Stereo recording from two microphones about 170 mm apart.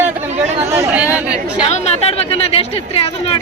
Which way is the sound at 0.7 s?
10° right (ahead or behind).